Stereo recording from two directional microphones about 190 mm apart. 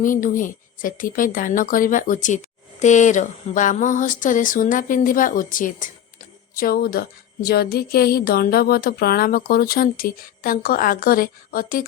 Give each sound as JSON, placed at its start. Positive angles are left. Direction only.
{"t": 0.0, "sound": "speech", "side_deg": 45}